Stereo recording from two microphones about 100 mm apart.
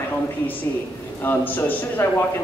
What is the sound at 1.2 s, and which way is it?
Speech, 20° left (ahead or behind).